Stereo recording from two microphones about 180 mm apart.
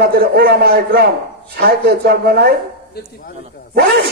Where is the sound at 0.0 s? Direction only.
60° right (ahead or behind).